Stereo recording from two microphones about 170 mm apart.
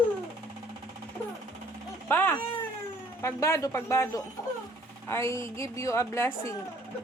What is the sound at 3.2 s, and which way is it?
Speech, 15° left (ahead or behind).